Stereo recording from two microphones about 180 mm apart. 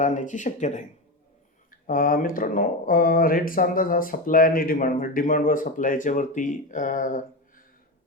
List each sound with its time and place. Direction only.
0.0 s speech: 45° left (ahead or behind)
1.9 s speech: 50° left (ahead or behind)